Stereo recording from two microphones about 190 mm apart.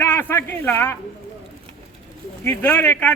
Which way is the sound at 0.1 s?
10° left (ahead or behind).